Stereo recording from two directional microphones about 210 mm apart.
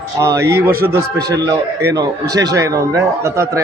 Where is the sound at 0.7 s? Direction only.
45° right (ahead or behind).